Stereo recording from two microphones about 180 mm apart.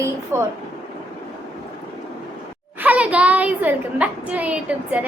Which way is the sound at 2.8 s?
5° right (ahead or behind).